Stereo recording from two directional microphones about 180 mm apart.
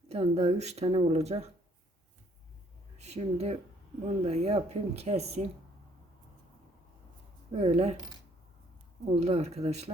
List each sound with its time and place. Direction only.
0.1 s speech: 35° right (ahead or behind)
3.0 s speech: 35° right (ahead or behind)
7.5 s speech: 35° right (ahead or behind)
9.2 s speech: 35° right (ahead or behind)